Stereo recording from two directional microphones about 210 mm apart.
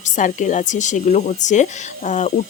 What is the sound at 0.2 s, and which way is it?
Speech, 35° left (ahead or behind).